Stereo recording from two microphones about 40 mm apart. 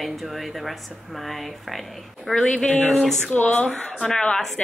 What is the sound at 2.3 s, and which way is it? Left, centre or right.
Speech, centre.